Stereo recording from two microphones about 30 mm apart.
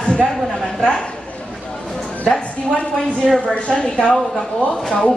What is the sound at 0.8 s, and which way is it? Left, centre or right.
Speech, left.